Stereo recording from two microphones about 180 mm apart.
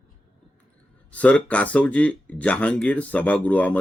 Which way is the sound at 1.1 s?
5° left (ahead or behind).